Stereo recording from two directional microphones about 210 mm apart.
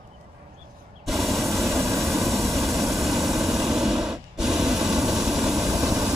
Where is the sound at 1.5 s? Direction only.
15° right (ahead or behind).